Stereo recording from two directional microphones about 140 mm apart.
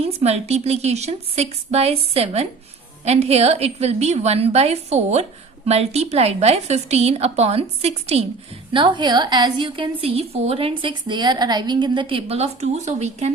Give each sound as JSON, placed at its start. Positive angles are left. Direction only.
{"t": 0.0, "sound": "a woman's voice", "side_deg": -50}
{"t": 8.7, "sound": "a woman's voice", "side_deg": -35}